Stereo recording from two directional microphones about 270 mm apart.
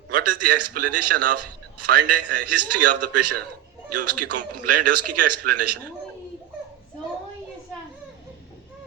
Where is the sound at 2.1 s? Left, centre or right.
Right.